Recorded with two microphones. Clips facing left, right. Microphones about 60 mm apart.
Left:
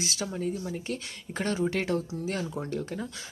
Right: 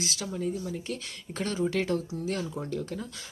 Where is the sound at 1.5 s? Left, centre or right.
Centre.